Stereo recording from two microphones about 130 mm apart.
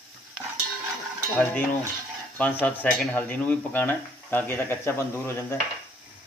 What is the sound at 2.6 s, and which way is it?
Speech, 10° left (ahead or behind).